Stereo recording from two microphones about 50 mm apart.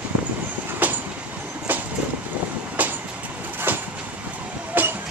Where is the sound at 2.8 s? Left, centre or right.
Right.